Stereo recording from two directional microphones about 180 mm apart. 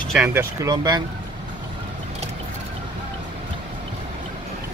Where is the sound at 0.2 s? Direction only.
10° right (ahead or behind).